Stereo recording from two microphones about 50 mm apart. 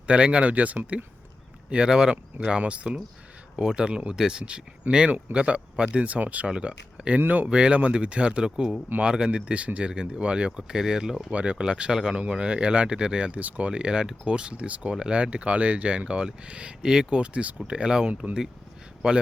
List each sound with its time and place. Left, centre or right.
0.1 s speech: right
1.7 s speech: centre
7.2 s speech: right
7.5 s speech: right
11.3 s speech: right